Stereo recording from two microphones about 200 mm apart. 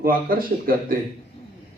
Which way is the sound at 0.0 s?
45° right (ahead or behind).